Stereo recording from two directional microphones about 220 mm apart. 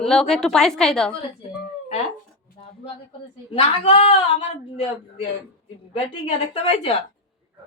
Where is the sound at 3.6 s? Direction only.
25° left (ahead or behind).